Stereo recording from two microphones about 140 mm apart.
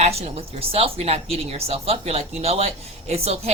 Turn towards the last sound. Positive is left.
turn(degrees=-50)  # may be behind; listen again after turning